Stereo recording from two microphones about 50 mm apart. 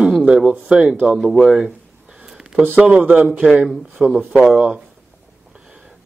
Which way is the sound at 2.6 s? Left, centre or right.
Right.